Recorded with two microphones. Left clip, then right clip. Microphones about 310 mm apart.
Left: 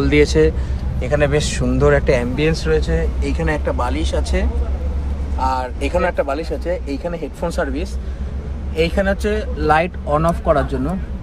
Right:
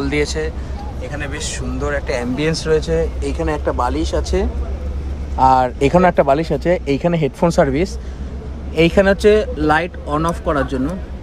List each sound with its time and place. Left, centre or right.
0.0 s speech: centre
1.1 s a man's voice: centre
2.0 s speech: centre
5.4 s speech: right
9.6 s speech: centre